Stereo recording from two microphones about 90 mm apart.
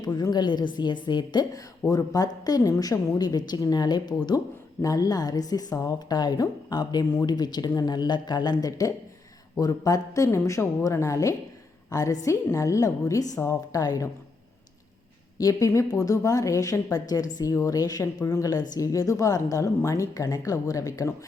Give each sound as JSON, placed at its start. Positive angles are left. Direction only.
{"t": 0.0, "sound": "a woman's voice", "side_deg": 45}
{"t": 15.4, "sound": "a woman's voice", "side_deg": 40}